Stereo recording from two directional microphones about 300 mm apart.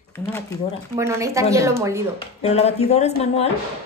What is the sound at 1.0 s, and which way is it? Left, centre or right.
A woman's voice, centre.